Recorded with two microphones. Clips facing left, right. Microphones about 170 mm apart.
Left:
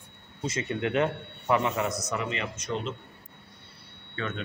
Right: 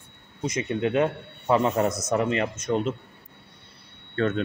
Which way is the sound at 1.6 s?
45° right (ahead or behind).